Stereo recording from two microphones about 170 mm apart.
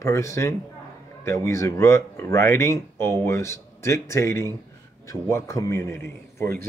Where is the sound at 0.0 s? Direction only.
20° left (ahead or behind).